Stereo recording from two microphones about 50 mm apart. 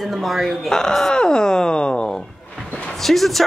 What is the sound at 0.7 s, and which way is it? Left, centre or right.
Speech, centre.